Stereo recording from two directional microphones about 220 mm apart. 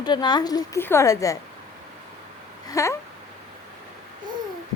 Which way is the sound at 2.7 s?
15° left (ahead or behind).